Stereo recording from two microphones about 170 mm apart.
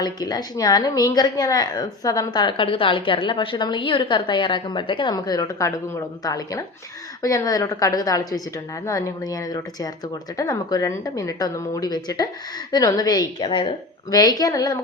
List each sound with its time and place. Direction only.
0.0 s a woman's voice: 25° left (ahead or behind)